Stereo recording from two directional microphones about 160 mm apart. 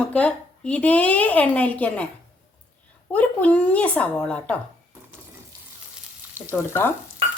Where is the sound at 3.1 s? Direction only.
10° left (ahead or behind).